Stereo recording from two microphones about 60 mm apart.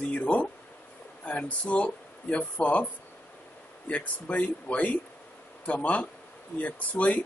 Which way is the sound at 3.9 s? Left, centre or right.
Left.